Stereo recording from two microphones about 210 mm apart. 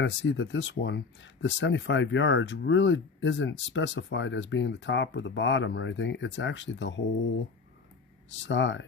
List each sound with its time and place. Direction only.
0.0 s speech: 60° left (ahead or behind)
8.4 s speech: 60° left (ahead or behind)